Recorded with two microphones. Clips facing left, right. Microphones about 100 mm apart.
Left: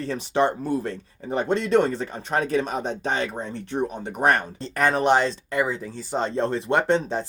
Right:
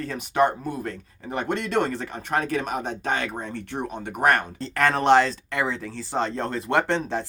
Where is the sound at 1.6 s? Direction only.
25° left (ahead or behind).